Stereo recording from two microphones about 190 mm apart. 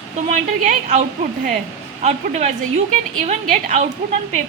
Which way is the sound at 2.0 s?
35° right (ahead or behind).